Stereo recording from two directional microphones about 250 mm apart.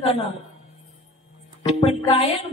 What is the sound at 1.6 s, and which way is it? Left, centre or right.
Speech, left.